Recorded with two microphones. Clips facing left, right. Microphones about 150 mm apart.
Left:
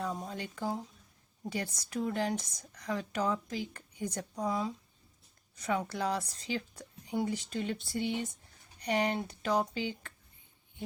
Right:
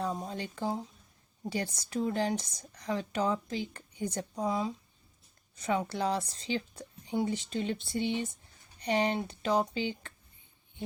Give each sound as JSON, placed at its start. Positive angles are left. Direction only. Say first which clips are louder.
{"t": 0.0, "sound": "speech", "louder": "right 2 dB", "side_deg": -25}